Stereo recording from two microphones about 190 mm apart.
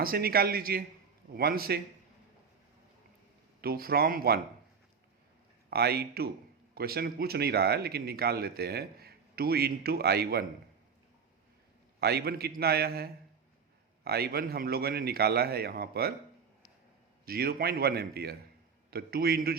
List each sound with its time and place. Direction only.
0.0 s speech: 50° right (ahead or behind)
3.6 s speech: 55° right (ahead or behind)
5.7 s speech: 55° right (ahead or behind)
11.9 s speech: 55° right (ahead or behind)
17.2 s speech: 55° right (ahead or behind)